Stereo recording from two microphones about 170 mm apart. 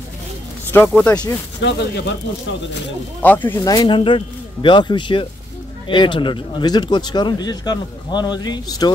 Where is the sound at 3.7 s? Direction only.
25° left (ahead or behind).